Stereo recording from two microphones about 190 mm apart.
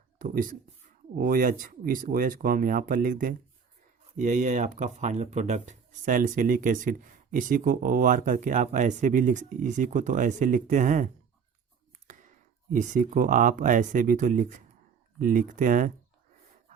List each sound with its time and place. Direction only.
0.2 s speech: 45° right (ahead or behind)
12.7 s speech: 40° right (ahead or behind)